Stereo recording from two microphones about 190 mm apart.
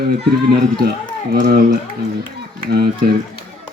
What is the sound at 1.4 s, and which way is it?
A man's voice, 50° right (ahead or behind).